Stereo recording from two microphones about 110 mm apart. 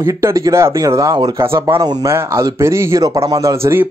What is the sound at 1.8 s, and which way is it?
Speech, 40° right (ahead or behind).